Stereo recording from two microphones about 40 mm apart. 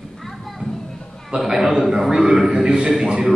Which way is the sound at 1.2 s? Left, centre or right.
Centre.